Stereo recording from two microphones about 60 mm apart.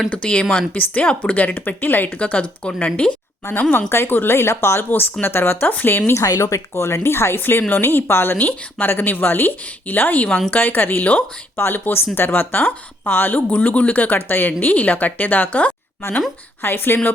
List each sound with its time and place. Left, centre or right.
0.1 s speech: centre
2.1 s speech: left
3.6 s speech: left
6.2 s speech: left
11.5 s speech: left
16.6 s speech: left